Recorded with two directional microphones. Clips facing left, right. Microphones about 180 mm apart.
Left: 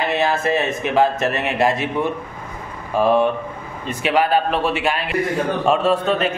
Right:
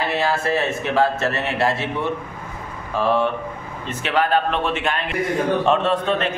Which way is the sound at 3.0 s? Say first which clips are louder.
Left 4 dB; 15° left (ahead or behind).